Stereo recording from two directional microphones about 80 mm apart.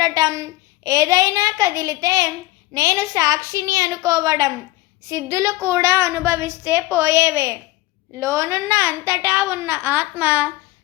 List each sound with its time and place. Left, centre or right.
0.0 s a woman's voice: right